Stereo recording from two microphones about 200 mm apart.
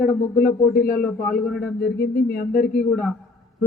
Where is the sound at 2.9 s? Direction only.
Centre (ahead or behind).